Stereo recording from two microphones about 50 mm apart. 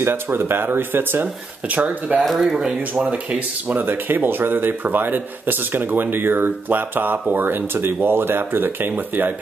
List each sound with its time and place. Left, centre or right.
0.0 s speech: right
1.2 s speech: right
2.3 s speech: centre
3.1 s speech: right